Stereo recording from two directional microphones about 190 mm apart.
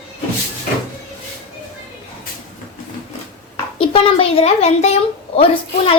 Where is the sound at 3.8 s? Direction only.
25° left (ahead or behind).